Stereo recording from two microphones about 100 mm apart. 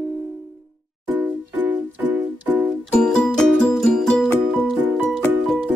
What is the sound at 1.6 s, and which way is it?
Music, 15° right (ahead or behind).